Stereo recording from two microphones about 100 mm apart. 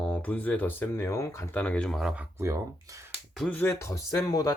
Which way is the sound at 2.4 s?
35° right (ahead or behind).